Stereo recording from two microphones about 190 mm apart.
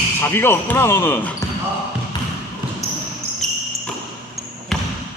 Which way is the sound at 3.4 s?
Centre (ahead or behind).